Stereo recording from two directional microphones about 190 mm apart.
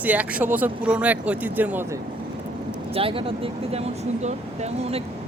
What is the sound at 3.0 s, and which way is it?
Speech, 30° right (ahead or behind).